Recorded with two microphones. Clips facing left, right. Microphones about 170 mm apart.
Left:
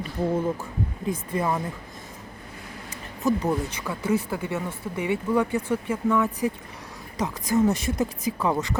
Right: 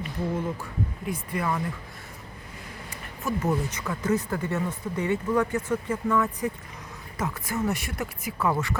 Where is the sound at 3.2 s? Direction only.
10° left (ahead or behind).